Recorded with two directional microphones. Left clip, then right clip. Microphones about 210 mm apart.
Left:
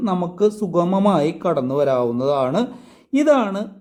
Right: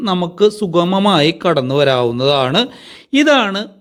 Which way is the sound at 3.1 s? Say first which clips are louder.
Right 4 dB; 20° right (ahead or behind).